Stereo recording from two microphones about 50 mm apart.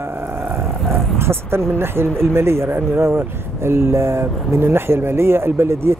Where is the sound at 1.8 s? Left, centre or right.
Right.